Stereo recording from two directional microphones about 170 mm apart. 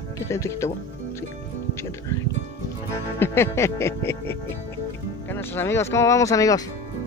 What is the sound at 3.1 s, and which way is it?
Speech, 15° left (ahead or behind).